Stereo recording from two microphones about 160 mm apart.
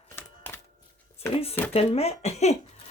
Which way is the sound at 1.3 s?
40° left (ahead or behind).